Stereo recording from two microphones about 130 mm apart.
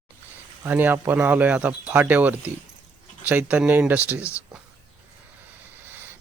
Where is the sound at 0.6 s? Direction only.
15° right (ahead or behind).